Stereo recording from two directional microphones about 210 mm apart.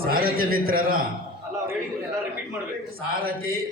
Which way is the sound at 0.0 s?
45° right (ahead or behind).